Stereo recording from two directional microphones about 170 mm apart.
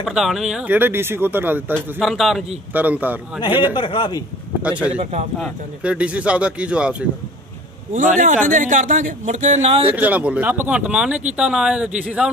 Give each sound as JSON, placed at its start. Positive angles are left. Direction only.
{"t": 0.0, "sound": "a man's voice", "side_deg": 0}
{"t": 2.0, "sound": "a man's voice", "side_deg": 0}
{"t": 3.7, "sound": "a man's voice", "side_deg": 30}
{"t": 4.6, "sound": "a man's voice", "side_deg": -10}
{"t": 7.9, "sound": "speech", "side_deg": -50}
{"t": 9.8, "sound": "a man's voice", "side_deg": -10}